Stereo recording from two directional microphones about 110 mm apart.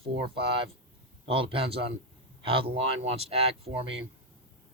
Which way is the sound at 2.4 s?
60° right (ahead or behind).